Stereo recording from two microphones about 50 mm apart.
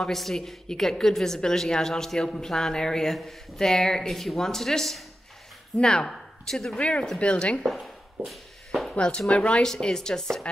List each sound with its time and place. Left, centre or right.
0.1 s a woman's voice: centre
5.8 s speech: centre
6.8 s speech: left
7.6 s a sound: centre
8.9 s speech: centre
9.7 s a woman's voice: centre